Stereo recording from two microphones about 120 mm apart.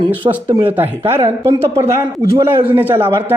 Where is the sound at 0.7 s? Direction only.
15° right (ahead or behind).